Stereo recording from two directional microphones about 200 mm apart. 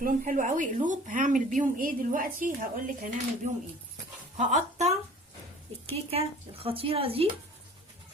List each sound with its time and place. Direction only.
0.0 s a woman's voice: 40° right (ahead or behind)